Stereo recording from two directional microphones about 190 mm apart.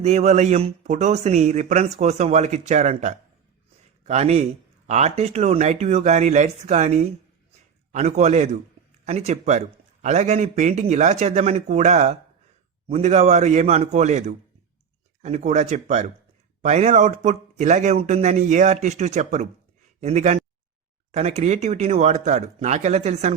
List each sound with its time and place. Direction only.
0.0 s a man's voice: 35° right (ahead or behind)